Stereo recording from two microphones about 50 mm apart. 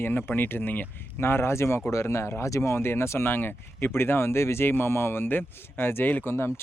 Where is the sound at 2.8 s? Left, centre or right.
Left.